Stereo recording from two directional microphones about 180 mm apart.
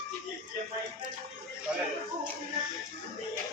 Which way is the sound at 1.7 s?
5° right (ahead or behind).